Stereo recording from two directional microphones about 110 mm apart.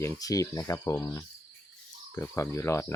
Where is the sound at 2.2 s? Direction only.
25° left (ahead or behind).